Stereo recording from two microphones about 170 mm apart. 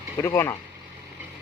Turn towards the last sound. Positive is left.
turn(degrees=15)  # may be behind; listen again after turning